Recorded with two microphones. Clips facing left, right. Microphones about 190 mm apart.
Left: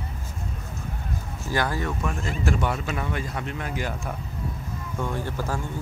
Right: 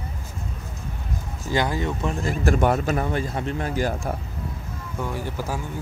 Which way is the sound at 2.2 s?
45° right (ahead or behind).